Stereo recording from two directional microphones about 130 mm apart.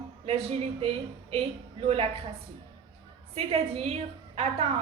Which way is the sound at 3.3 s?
50° right (ahead or behind).